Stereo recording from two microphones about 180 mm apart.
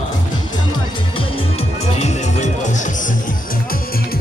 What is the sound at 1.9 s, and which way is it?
Music, 40° left (ahead or behind).